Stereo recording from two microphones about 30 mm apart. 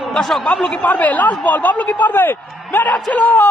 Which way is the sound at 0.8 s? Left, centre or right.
Left.